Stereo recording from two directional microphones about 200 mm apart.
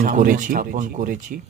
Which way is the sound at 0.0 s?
40° right (ahead or behind).